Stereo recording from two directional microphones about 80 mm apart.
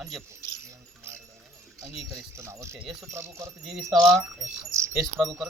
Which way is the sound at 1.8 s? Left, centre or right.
Centre.